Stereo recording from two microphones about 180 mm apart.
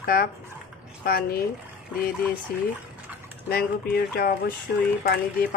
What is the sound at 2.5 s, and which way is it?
Speech, 55° left (ahead or behind).